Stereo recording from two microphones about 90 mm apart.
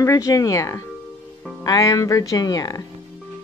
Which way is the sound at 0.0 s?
40° left (ahead or behind).